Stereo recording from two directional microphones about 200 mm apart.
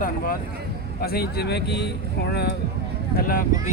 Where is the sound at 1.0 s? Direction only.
50° left (ahead or behind).